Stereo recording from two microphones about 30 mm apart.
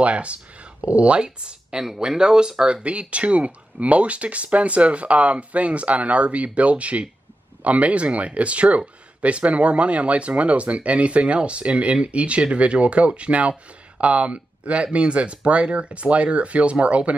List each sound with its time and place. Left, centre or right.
0.0 s speech: right
2.8 s speech: right